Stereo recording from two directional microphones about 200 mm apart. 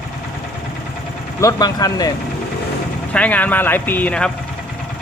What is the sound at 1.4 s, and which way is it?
Speech, 15° left (ahead or behind).